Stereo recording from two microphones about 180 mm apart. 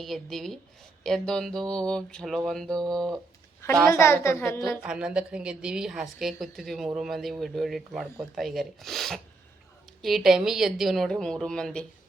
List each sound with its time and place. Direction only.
0.0 s speech: centre (ahead or behind)
3.9 s a woman's voice: 15° left (ahead or behind)
4.8 s speech: 5° right (ahead or behind)